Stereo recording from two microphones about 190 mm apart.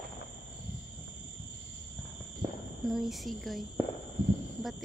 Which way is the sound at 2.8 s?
Centre (ahead or behind).